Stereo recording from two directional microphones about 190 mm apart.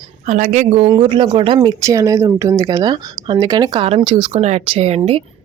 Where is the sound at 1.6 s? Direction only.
15° right (ahead or behind).